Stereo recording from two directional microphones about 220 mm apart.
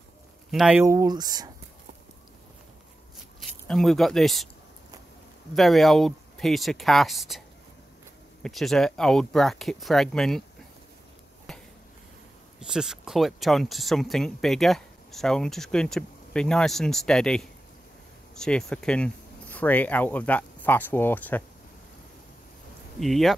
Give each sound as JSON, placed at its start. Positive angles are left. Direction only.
{"t": 0.5, "sound": "speech", "side_deg": 0}
{"t": 0.8, "sound": "speech", "side_deg": -15}
{"t": 3.3, "sound": "speech", "side_deg": 0}
{"t": 5.5, "sound": "speech", "side_deg": 0}
{"t": 11.5, "sound": "a sound", "side_deg": 0}
{"t": 12.5, "sound": "speech", "side_deg": -5}
{"t": 22.9, "sound": "speech", "side_deg": 0}